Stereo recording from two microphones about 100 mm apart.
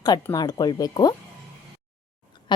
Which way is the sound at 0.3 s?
40° left (ahead or behind).